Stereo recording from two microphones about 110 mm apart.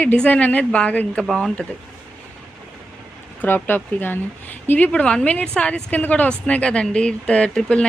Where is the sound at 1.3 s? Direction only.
Centre (ahead or behind).